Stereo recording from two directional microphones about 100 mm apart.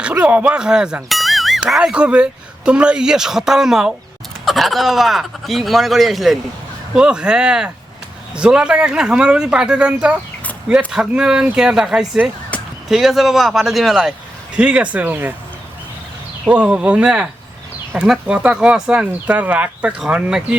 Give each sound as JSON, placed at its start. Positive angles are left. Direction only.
{"t": 0.0, "sound": "speech", "side_deg": -15}
{"t": 16.5, "sound": "speech", "side_deg": -10}